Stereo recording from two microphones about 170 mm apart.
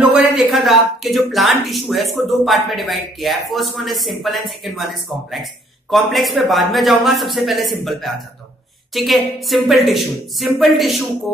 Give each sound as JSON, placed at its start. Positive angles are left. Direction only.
{"t": 0.5, "sound": "speech", "side_deg": 0}